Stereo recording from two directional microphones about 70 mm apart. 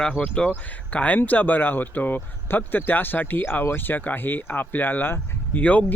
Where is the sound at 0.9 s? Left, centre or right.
Left.